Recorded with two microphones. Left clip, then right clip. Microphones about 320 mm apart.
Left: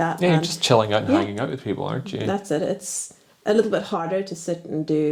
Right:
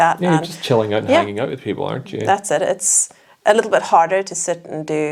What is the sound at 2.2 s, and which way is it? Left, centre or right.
Speech, right.